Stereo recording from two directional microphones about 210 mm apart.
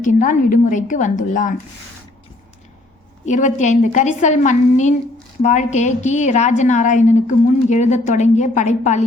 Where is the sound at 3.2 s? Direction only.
35° left (ahead or behind).